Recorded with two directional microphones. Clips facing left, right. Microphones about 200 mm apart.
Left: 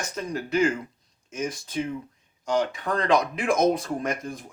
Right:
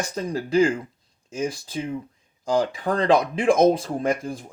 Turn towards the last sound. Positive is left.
turn(degrees=-30)  # may be behind; listen again after turning